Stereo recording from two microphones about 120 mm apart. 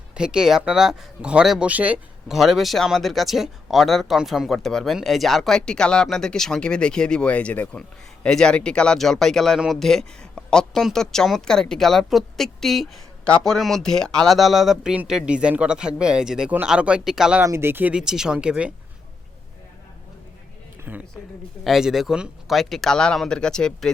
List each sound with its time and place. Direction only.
0.1 s speech: 5° right (ahead or behind)
17.4 s speech: 20° right (ahead or behind)
20.9 s speech: 15° right (ahead or behind)
21.6 s speech: 5° right (ahead or behind)